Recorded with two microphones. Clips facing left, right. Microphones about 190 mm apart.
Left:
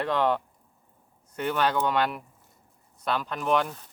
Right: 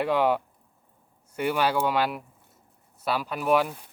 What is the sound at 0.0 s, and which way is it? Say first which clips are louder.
Speech: right 2 dB; 10° right (ahead or behind).